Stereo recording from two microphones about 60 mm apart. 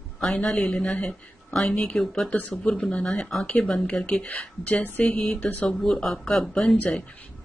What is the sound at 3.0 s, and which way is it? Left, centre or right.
Speech, centre.